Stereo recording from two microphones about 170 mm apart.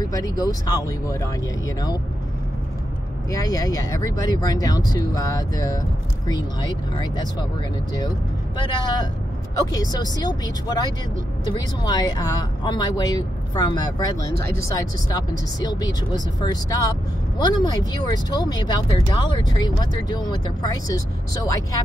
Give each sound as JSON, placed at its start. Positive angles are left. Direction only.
{"t": 0.0, "sound": "speech", "side_deg": 20}
{"t": 3.3, "sound": "speech", "side_deg": 20}
{"t": 8.5, "sound": "speech", "side_deg": 25}